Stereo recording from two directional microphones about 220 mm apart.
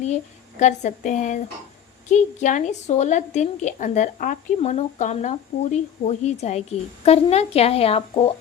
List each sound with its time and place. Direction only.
0.6 s a woman's voice: 35° left (ahead or behind)